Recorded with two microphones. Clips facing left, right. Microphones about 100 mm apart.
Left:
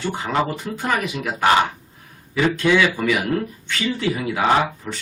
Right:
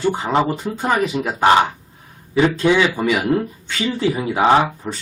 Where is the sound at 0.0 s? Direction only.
30° right (ahead or behind).